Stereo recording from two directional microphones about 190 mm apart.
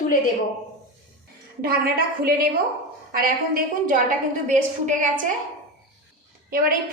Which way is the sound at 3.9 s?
40° right (ahead or behind).